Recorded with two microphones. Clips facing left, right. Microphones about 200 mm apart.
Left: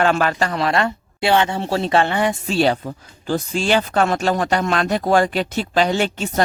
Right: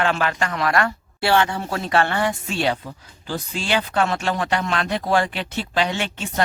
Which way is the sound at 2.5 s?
40° left (ahead or behind).